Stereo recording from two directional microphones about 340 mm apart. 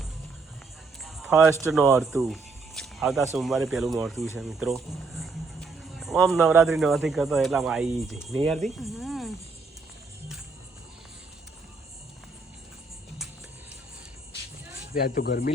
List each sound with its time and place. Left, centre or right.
1.0 s speech: centre
15.0 s speech: left